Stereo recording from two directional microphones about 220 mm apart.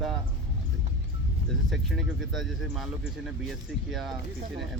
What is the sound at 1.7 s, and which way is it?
Speech, centre (ahead or behind).